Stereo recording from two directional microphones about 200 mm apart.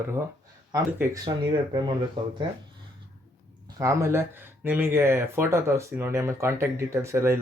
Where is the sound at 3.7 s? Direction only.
15° right (ahead or behind).